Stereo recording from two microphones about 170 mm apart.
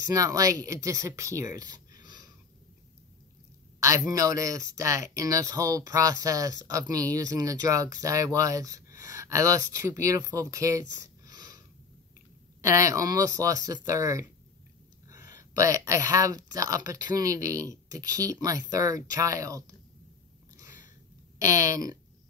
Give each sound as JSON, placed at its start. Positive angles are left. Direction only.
{"t": 0.1, "sound": "speech", "side_deg": -20}
{"t": 4.1, "sound": "speech", "side_deg": -20}
{"t": 12.6, "sound": "speech", "side_deg": -20}
{"t": 21.4, "sound": "speech", "side_deg": -20}